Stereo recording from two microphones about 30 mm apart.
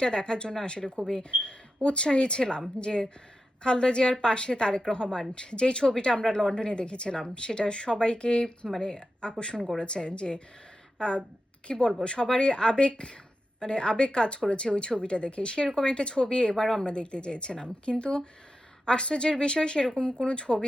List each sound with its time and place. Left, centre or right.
0.0 s speech: left
11.7 s speech: left
16.6 s speech: centre
16.8 s speech: left